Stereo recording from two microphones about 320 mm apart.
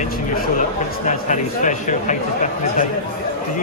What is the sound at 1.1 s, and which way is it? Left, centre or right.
Speech, left.